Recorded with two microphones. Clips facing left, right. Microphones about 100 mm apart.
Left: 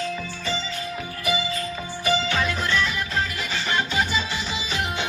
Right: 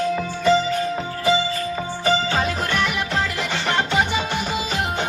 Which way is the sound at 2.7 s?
60° right (ahead or behind).